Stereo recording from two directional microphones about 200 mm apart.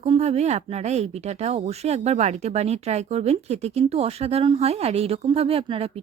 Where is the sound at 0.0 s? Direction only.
30° right (ahead or behind).